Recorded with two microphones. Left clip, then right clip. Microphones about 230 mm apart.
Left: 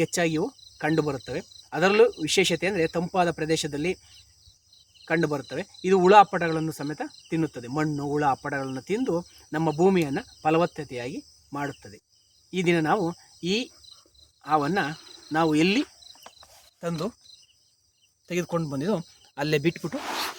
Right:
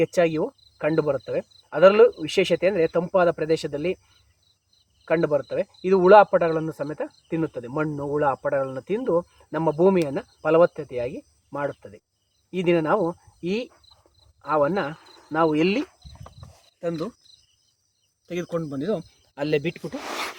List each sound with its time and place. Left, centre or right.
0.0 s cricket: left
5.0 s speech: left
16.2 s cricket: left
18.3 s speech: left